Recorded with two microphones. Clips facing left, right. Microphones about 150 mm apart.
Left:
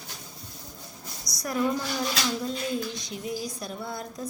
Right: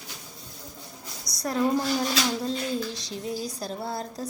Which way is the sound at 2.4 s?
30° right (ahead or behind).